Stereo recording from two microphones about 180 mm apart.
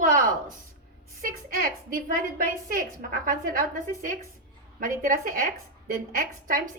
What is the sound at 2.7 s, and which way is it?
A woman's voice, 50° right (ahead or behind).